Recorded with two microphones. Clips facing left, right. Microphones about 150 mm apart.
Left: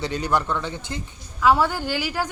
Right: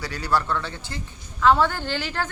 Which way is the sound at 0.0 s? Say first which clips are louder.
Left 2 dB; 20° left (ahead or behind).